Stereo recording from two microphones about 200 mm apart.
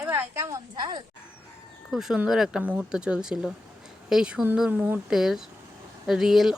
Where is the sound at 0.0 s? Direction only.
10° right (ahead or behind).